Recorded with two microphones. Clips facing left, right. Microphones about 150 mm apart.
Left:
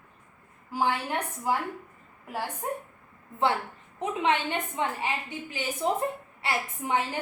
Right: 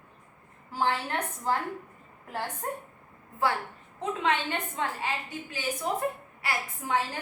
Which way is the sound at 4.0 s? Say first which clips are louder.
Left 2 dB; 20° left (ahead or behind).